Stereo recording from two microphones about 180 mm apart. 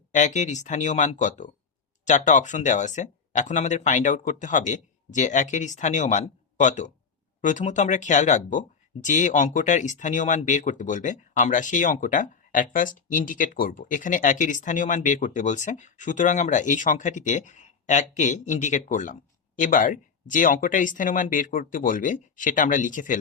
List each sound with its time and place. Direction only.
0.1 s speech: 40° left (ahead or behind)